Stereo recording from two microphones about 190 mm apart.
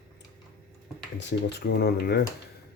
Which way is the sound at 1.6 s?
55° left (ahead or behind).